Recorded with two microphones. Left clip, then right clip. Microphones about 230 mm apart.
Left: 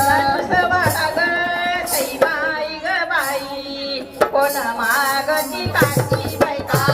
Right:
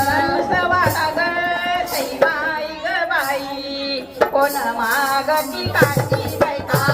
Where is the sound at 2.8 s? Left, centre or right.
Centre.